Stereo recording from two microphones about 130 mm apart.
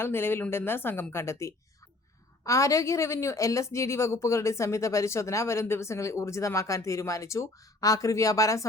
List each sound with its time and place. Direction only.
0.0 s a woman's voice: 15° left (ahead or behind)